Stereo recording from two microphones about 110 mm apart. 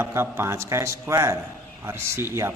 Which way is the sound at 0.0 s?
25° right (ahead or behind).